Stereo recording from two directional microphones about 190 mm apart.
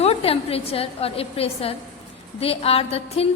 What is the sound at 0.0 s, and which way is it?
A woman's voice, 30° left (ahead or behind).